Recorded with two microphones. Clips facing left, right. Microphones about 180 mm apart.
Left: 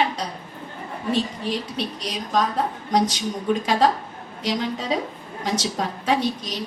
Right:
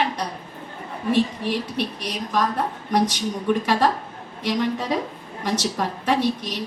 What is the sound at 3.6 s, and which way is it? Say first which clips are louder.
A woman's voice: left 1 dB; 55° right (ahead or behind).